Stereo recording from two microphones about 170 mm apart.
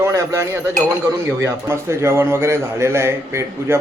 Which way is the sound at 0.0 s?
20° right (ahead or behind).